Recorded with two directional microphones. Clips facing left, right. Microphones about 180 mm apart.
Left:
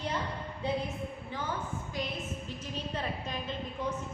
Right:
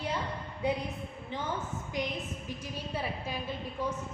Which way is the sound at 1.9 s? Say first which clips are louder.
Right 3 dB; 15° right (ahead or behind).